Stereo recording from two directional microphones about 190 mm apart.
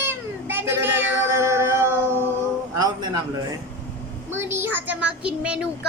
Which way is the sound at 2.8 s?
20° right (ahead or behind).